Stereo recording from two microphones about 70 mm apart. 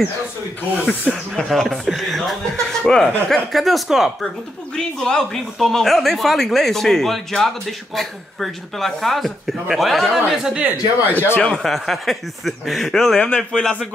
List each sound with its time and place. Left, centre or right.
1.1 s speech: centre
4.7 s speech: centre
10.5 s speech: centre
11.1 s speech: left
11.5 s speech: centre